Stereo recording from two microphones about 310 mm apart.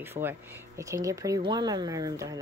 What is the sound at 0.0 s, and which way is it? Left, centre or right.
Speech, centre.